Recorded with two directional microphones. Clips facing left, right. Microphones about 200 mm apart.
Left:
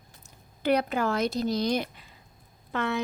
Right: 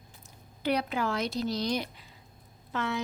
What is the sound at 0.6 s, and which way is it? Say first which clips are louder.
A woman's voice: left 4 dB; 50° left (ahead or behind).